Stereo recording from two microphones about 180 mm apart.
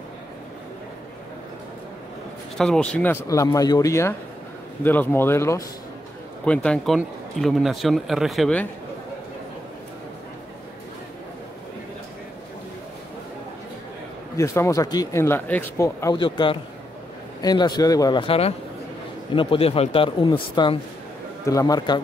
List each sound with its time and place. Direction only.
2.5 s speech: 5° left (ahead or behind)
14.3 s a man's voice: 15° left (ahead or behind)